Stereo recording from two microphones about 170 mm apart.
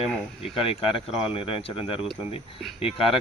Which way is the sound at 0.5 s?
30° left (ahead or behind).